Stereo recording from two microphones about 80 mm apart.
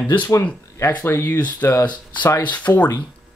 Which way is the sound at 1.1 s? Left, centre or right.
Left.